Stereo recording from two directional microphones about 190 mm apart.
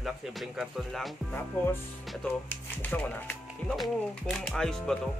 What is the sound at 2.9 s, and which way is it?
Speech, 10° left (ahead or behind).